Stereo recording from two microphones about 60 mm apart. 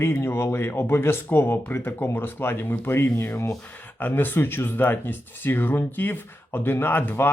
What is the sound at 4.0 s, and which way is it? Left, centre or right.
Speech, left.